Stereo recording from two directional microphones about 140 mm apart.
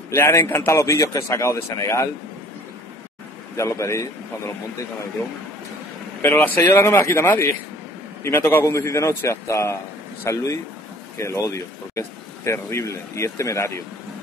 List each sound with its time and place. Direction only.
0.1 s speech: 20° left (ahead or behind)
3.5 s speech: 20° left (ahead or behind)
6.2 s speech: 15° left (ahead or behind)